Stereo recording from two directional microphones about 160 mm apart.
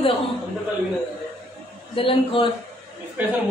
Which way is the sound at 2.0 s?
35° left (ahead or behind).